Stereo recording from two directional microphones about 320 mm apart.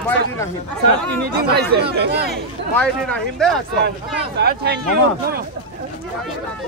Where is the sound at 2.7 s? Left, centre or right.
Centre.